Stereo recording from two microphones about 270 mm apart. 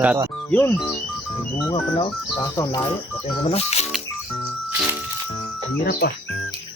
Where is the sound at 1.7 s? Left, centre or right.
Centre.